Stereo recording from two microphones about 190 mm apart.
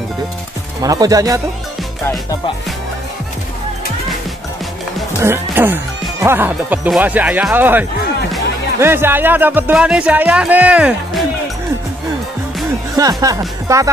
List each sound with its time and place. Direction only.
0.8 s speech: 20° right (ahead or behind)
5.2 s speech: 10° right (ahead or behind)
13.2 s speech: 20° right (ahead or behind)